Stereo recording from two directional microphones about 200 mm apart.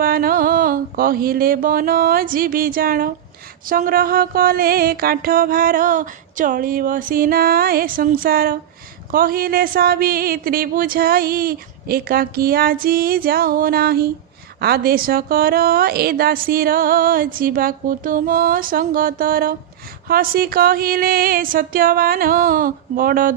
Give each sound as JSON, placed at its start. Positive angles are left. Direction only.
{"t": 0.0, "sound": "mantra", "side_deg": -45}